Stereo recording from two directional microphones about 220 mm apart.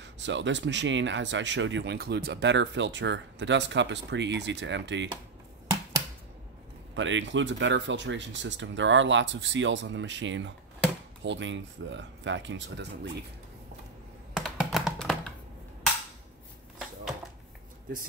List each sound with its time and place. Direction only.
0.0 s speech: 55° right (ahead or behind)
7.0 s speech: 55° right (ahead or behind)
14.3 s computer keyboard: centre (ahead or behind)